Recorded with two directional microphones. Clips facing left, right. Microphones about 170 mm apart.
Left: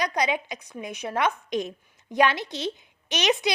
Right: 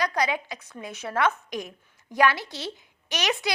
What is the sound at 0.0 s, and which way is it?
A woman's voice, 20° left (ahead or behind).